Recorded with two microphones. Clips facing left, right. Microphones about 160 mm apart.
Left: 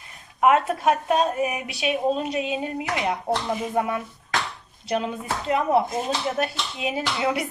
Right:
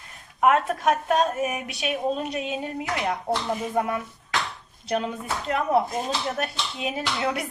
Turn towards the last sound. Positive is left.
turn(degrees=5)  # may be behind; listen again after turning